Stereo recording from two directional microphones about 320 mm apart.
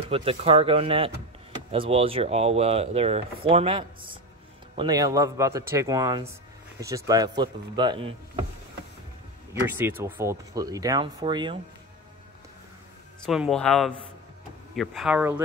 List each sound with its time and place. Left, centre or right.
0.0 s speech: centre
9.5 s speech: centre
13.2 s speech: centre